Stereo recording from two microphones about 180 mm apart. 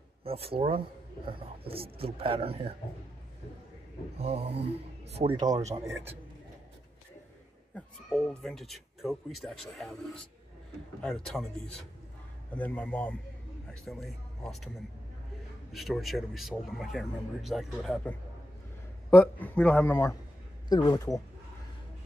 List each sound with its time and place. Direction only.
0.2 s speech: 30° right (ahead or behind)
4.2 s speech: 35° right (ahead or behind)
7.7 s a man's voice: 5° left (ahead or behind)
15.7 s a man's voice: centre (ahead or behind)
20.6 s speech: 25° left (ahead or behind)